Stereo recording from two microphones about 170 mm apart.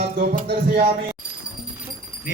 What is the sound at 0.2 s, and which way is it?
Music, 65° right (ahead or behind).